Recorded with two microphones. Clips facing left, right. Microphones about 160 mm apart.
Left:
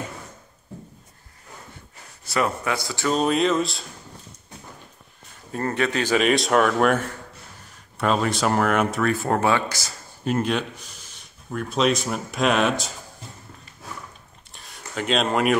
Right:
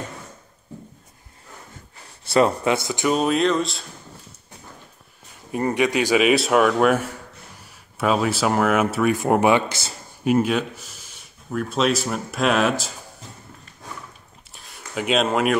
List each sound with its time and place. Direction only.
2.2 s speech: 30° right (ahead or behind)
3.2 s speech: centre (ahead or behind)
5.5 s speech: 15° right (ahead or behind)
10.2 s speech: 10° right (ahead or behind)
14.5 s a sound: centre (ahead or behind)